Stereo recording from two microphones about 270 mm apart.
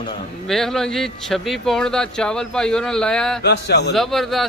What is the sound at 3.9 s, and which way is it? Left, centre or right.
Speech, centre.